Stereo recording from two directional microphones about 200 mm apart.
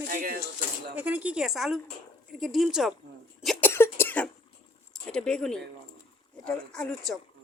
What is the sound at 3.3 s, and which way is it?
Cough, 10° left (ahead or behind).